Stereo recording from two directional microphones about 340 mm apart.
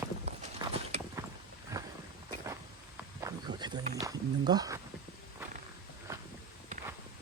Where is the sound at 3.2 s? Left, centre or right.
Centre.